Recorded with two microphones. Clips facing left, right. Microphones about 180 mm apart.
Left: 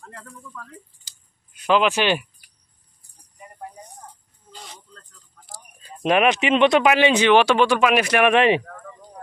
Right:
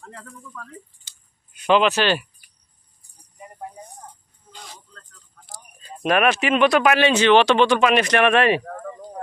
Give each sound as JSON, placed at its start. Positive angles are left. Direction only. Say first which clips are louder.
{"t": 1.7, "sound": "a man's voice", "louder": "right 1 dB", "side_deg": 10}
{"t": 6.0, "sound": "a man's voice", "louder": "left 1 dB", "side_deg": 20}
{"t": 8.6, "sound": "a sound", "louder": "right 7 dB", "side_deg": -45}